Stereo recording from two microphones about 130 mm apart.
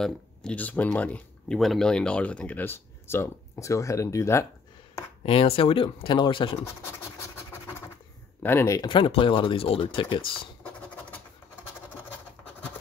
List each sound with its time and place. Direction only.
0.0 s speech: 5° left (ahead or behind)
5.2 s speech: 45° left (ahead or behind)
8.4 s speech: 15° left (ahead or behind)
8.8 s speech: 40° left (ahead or behind)